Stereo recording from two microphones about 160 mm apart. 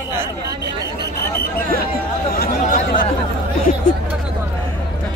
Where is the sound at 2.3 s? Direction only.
65° left (ahead or behind).